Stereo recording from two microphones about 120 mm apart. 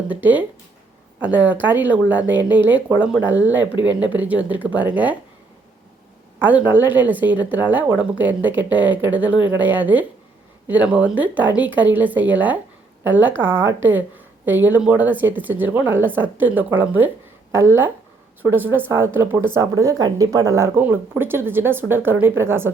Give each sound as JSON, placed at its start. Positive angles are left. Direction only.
{"t": 0.1, "sound": "speech", "side_deg": -15}
{"t": 6.4, "sound": "speech", "side_deg": -15}
{"t": 19.7, "sound": "speech", "side_deg": -30}